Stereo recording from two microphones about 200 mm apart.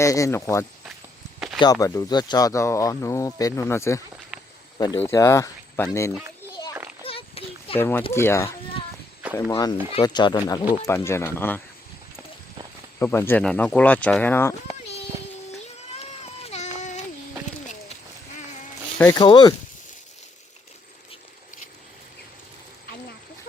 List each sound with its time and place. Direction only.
0.0 s speech: 15° left (ahead or behind)
7.0 s a sound: 25° left (ahead or behind)
7.8 s speech: 10° left (ahead or behind)
9.5 s speech: 20° left (ahead or behind)
13.0 s speech: 10° left (ahead or behind)
15.9 s a sound: 30° left (ahead or behind)
18.9 s speech: 15° left (ahead or behind)